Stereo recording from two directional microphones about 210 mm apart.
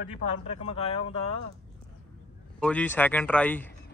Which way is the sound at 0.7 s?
25° left (ahead or behind).